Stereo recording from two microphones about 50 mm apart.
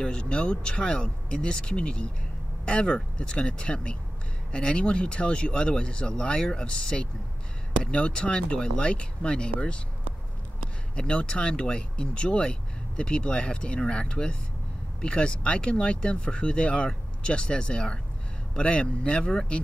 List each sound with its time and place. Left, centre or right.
0.0 s speech: centre